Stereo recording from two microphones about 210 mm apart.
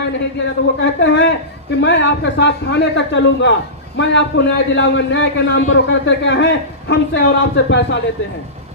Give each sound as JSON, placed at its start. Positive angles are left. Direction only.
{"t": 0.3, "sound": "a man's voice", "side_deg": 60}